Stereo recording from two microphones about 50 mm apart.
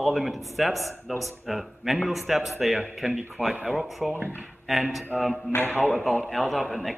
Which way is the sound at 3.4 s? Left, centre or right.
Right.